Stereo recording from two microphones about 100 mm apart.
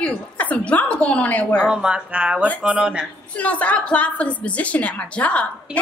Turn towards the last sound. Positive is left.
turn(degrees=15)  # may be behind; listen again after turning